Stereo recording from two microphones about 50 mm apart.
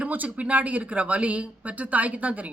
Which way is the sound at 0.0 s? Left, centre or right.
Right.